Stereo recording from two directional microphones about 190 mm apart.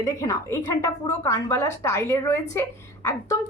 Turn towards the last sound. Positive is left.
turn(degrees=15)  # may be behind; listen again after turning